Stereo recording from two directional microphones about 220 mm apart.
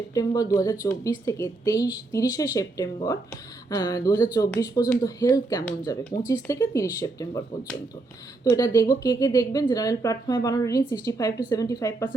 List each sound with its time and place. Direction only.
0.1 s a woman's voice: 15° left (ahead or behind)